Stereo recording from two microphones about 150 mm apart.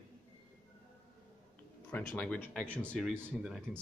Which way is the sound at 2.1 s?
10° left (ahead or behind).